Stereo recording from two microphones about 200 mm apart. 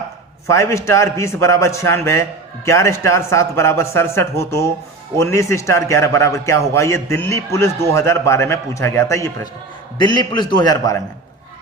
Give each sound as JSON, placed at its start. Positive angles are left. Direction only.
{"t": 0.4, "sound": "a man's voice", "side_deg": 15}